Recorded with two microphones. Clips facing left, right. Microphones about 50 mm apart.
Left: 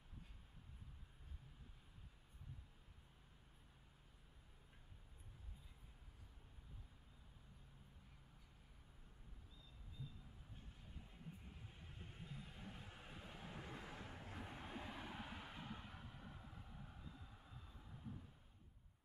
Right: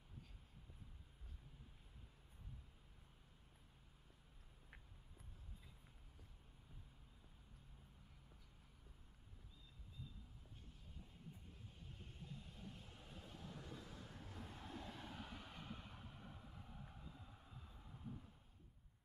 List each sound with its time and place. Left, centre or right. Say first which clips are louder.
12.4 s vehicle: left 1 dB; left
14.1 s vehicle: left 2 dB; left; by 18.1 s centre